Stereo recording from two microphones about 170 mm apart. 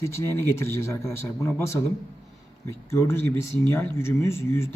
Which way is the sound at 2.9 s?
15° left (ahead or behind).